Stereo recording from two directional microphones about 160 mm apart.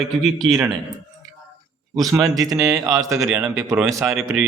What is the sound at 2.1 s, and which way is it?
A man's voice, 20° right (ahead or behind).